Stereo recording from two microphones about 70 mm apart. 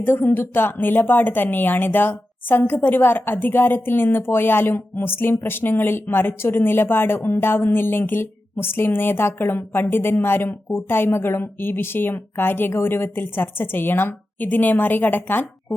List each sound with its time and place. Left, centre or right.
0.0 s speech: left